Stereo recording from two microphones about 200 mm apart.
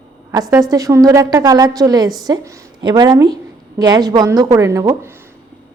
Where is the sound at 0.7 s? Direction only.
15° right (ahead or behind).